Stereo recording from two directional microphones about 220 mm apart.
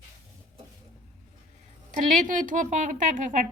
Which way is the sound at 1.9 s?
35° right (ahead or behind).